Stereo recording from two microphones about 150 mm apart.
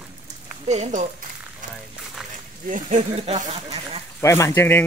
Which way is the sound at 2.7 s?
55° right (ahead or behind).